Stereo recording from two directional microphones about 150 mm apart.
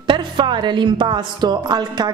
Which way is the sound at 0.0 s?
30° right (ahead or behind).